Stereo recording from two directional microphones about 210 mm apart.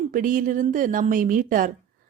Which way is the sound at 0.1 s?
40° right (ahead or behind).